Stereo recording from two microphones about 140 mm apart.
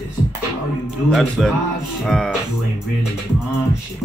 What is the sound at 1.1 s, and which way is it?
Music, centre (ahead or behind).